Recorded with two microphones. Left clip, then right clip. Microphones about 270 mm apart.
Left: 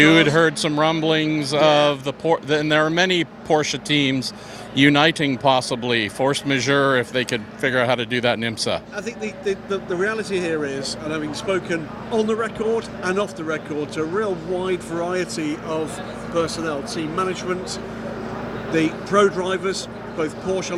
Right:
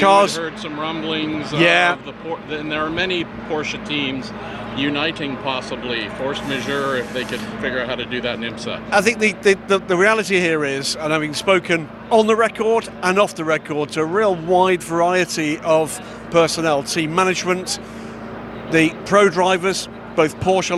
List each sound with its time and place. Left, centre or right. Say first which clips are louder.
0.3 s speech: left 8 dB; left
4.8 s speech: left 6 dB; left
8.9 s a man's voice: right 13 dB; right